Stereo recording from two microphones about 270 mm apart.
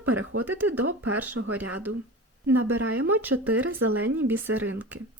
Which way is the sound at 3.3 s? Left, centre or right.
Right.